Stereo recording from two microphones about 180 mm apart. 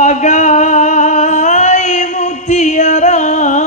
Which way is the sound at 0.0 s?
40° left (ahead or behind).